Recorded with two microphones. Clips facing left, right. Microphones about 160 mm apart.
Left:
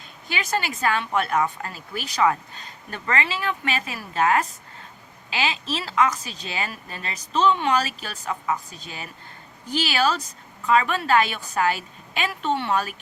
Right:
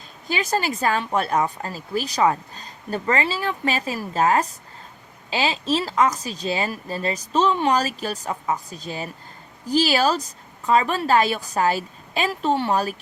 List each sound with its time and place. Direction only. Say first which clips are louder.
0.3 s speech: right 4 dB; 40° right (ahead or behind)